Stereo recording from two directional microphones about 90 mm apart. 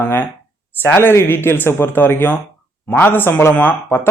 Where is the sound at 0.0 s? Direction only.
25° left (ahead or behind).